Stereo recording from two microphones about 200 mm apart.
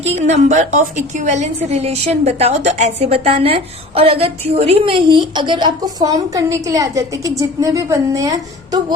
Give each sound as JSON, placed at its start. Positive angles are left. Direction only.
{"t": 0.0, "sound": "a woman's voice", "side_deg": -35}